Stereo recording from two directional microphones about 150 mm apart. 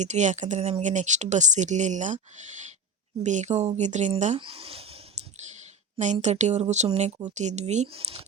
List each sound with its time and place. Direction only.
0.0 s speech: 55° right (ahead or behind)
4.4 s a sound: 40° right (ahead or behind)
5.2 s clicking: 50° right (ahead or behind)
6.2 s speech: 50° right (ahead or behind)